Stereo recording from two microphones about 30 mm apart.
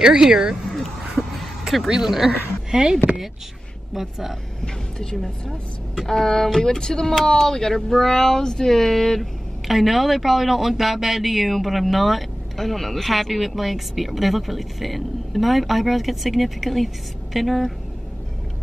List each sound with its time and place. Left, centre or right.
0.2 s speech: centre
1.9 s speech: centre
3.9 s speech: centre
4.9 s speech: centre
9.7 s speech: centre